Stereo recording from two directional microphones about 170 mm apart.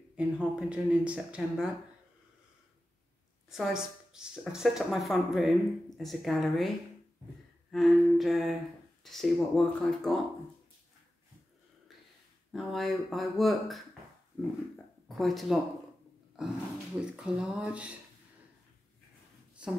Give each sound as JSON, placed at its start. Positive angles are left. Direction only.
{"t": 0.1, "sound": "a woman's voice", "side_deg": -5}
{"t": 3.4, "sound": "a woman's voice", "side_deg": 0}
{"t": 7.7, "sound": "a woman's voice", "side_deg": 0}
{"t": 12.5, "sound": "a woman's voice", "side_deg": 0}
{"t": 15.0, "sound": "a woman's voice", "side_deg": 0}
{"t": 19.6, "sound": "speech", "side_deg": -5}